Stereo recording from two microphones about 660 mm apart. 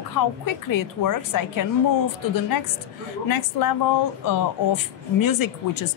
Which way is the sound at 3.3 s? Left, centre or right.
Left.